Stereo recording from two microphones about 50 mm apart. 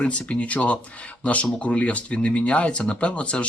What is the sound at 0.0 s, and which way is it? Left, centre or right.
Speech, left.